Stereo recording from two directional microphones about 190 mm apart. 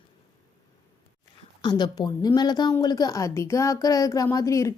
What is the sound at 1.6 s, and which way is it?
Speech, 20° left (ahead or behind).